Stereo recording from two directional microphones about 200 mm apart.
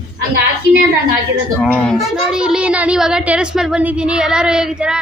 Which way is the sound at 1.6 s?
Centre (ahead or behind).